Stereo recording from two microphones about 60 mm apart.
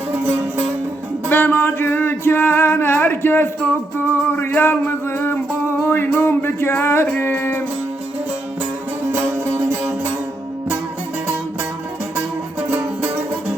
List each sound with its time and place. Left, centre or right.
0.1 s music: right
1.3 s a sound: left
3.9 s music: left
6.1 s a sound: left
6.7 s music: left
9.1 s music: right